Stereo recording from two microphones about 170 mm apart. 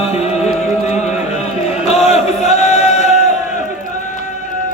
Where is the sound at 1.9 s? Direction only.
40° left (ahead or behind).